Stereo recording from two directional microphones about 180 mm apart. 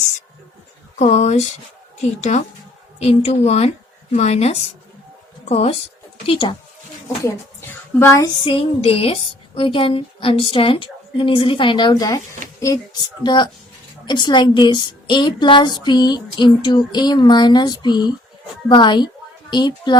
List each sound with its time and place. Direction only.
0.9 s a woman's voice: 40° left (ahead or behind)
7.7 s a sound: 15° left (ahead or behind)
8.4 s a woman's voice: 30° left (ahead or behind)